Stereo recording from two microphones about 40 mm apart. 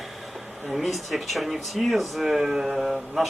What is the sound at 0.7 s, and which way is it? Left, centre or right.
Speech, centre.